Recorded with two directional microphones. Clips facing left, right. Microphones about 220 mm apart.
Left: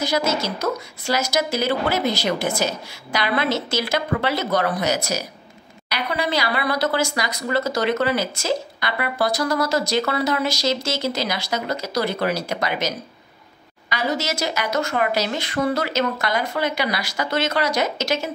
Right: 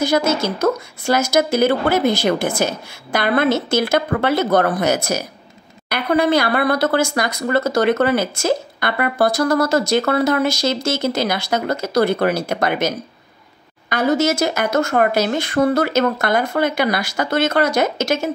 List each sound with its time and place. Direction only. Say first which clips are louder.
0.0 s speech: right 5 dB; 50° right (ahead or behind)